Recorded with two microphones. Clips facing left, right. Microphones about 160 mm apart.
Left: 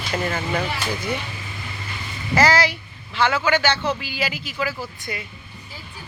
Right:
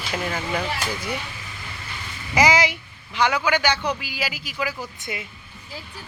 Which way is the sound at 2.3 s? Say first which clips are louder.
Left 1 dB; 15° right (ahead or behind).